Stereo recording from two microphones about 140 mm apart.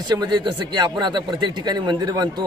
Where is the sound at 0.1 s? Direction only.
30° right (ahead or behind).